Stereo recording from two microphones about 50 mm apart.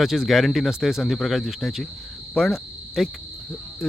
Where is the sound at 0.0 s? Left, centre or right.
Centre.